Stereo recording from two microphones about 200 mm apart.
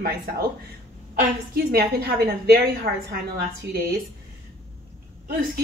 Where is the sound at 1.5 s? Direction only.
50° right (ahead or behind).